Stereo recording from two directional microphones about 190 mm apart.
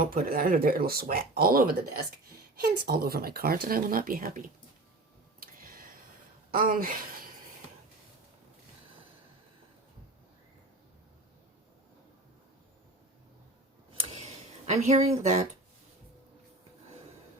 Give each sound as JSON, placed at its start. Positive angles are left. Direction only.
{"t": 0.0, "sound": "speech", "side_deg": -50}
{"t": 5.4, "sound": "tick-tock", "side_deg": -50}
{"t": 6.5, "sound": "speech", "side_deg": -50}
{"t": 13.9, "sound": "tick", "side_deg": -30}
{"t": 14.7, "sound": "speech", "side_deg": -35}